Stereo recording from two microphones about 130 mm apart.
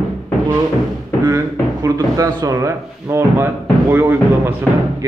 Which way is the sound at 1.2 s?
25° right (ahead or behind).